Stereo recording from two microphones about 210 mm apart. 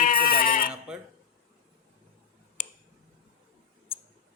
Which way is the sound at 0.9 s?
5° right (ahead or behind).